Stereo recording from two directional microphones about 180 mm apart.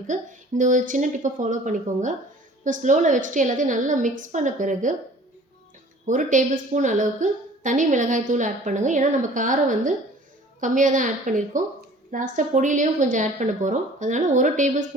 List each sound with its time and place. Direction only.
0.1 s a woman's voice: 45° right (ahead or behind)
6.1 s a woman's voice: 45° right (ahead or behind)